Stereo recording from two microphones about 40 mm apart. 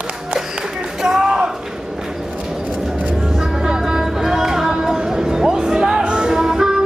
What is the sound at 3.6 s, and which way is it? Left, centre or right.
Music, centre.